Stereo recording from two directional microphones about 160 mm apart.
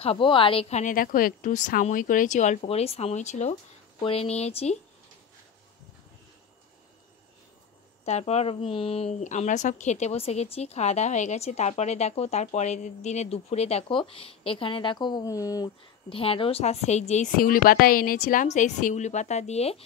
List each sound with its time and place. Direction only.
0.0 s a woman's voice: 35° left (ahead or behind)
8.0 s speech: 40° left (ahead or behind); by 15.7 s 20° left (ahead or behind)
16.1 s speech: 35° left (ahead or behind)
17.4 s a woman's voice: 65° left (ahead or behind); by 19.8 s 40° left (ahead or behind)